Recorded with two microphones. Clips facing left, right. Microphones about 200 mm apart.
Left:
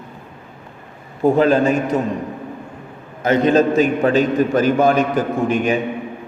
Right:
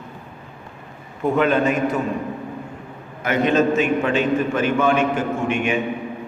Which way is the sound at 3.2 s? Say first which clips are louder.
Left 4 dB; 35° left (ahead or behind).